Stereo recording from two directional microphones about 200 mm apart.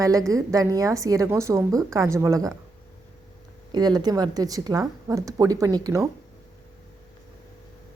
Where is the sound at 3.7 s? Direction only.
20° right (ahead or behind).